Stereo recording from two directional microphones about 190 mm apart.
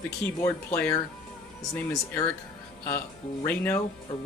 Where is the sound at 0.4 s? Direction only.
15° left (ahead or behind).